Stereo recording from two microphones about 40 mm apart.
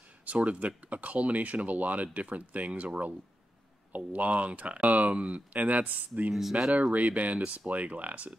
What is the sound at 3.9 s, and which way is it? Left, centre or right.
Speech, right.